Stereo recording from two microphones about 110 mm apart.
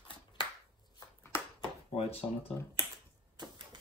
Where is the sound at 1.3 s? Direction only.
25° left (ahead or behind).